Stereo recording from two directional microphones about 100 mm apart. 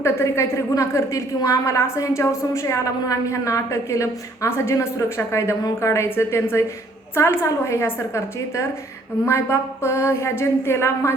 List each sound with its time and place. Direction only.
0.0 s a woman's voice: 30° left (ahead or behind)